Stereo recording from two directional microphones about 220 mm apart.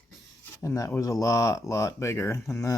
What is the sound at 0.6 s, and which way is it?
Speech, 15° left (ahead or behind).